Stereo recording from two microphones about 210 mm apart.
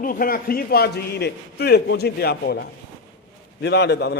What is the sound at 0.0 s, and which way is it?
A man's voice, 40° left (ahead or behind).